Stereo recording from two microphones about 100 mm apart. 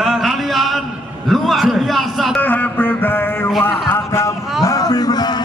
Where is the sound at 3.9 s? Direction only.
25° left (ahead or behind).